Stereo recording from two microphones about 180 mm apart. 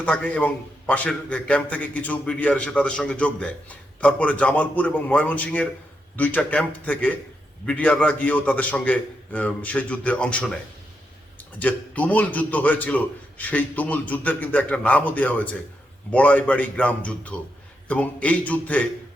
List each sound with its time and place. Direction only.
0.0 s a man's voice: 10° left (ahead or behind)